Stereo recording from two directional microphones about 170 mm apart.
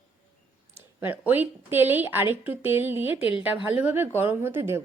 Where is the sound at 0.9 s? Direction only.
10° right (ahead or behind).